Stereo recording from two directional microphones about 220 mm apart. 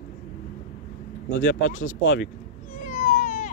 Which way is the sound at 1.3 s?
60° left (ahead or behind).